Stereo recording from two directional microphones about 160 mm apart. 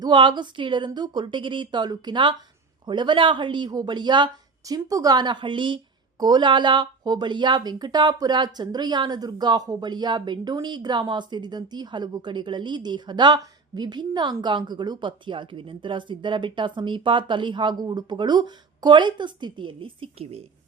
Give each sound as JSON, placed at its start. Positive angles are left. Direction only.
{"t": 0.0, "sound": "speech", "side_deg": -30}